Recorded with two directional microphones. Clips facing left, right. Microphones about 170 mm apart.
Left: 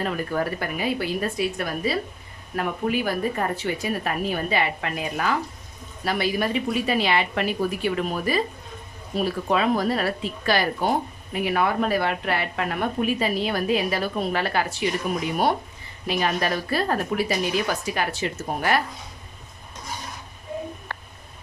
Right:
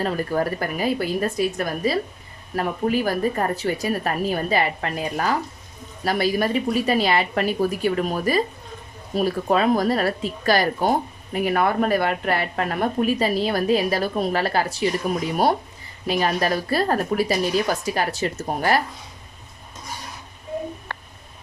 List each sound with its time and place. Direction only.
0.0 s speech: 35° right (ahead or behind)
16.0 s speech: 40° right (ahead or behind)